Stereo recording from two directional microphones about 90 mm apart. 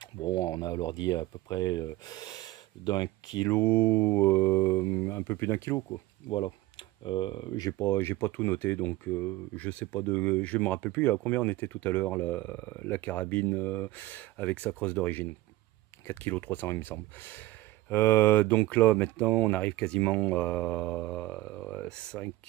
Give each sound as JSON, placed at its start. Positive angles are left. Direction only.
{"t": 0.2, "sound": "speech", "side_deg": 45}
{"t": 3.4, "sound": "speech", "side_deg": 25}
{"t": 6.2, "sound": "speech", "side_deg": 65}
{"t": 7.8, "sound": "speech", "side_deg": 25}